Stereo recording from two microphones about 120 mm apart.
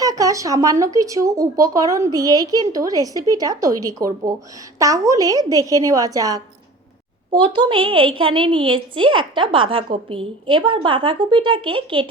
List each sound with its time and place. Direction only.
0.0 s speech: 30° right (ahead or behind)
7.3 s a woman's voice: 40° right (ahead or behind)